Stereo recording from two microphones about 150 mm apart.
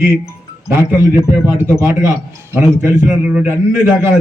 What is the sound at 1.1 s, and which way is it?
Speech, 15° left (ahead or behind).